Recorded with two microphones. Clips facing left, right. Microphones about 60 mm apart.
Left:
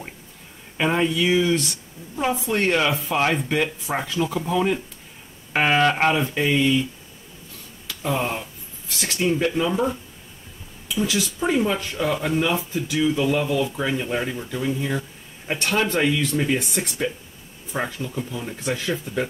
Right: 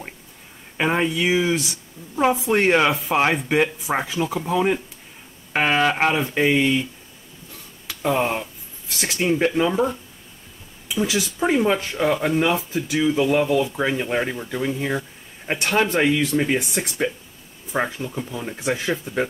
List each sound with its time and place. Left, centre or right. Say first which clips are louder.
0.7 s speech: even; centre
2.5 s speech: right 2 dB; right; by 6.3 s centre
6.3 s speech: right 1 dB; right
8.0 s speech: right 4 dB; centre
11.0 s speech: right 2 dB; centre
16.6 s speech: right 1 dB; centre
17.7 s speech: right 3 dB; centre